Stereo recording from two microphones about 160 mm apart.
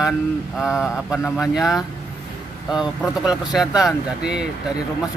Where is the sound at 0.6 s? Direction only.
Centre (ahead or behind).